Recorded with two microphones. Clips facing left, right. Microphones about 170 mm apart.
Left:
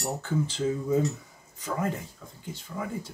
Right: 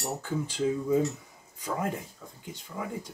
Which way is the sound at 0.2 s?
10° right (ahead or behind).